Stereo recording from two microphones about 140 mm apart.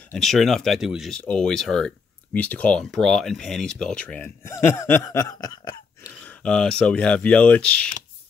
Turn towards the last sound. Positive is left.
turn(degrees=10)  # may be behind; listen again after turning